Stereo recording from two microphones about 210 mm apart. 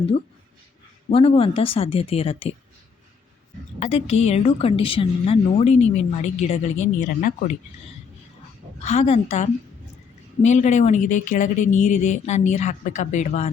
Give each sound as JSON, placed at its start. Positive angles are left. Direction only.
{"t": 1.1, "sound": "a woman's voice", "side_deg": 25}
{"t": 3.8, "sound": "a woman's voice", "side_deg": 30}
{"t": 8.8, "sound": "a woman's voice", "side_deg": 30}